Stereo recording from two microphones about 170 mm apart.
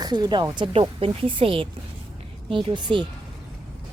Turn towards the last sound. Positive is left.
turn(degrees=-30)  # may be behind; listen again after turning